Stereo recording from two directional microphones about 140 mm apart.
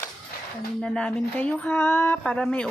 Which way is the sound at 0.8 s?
5° left (ahead or behind).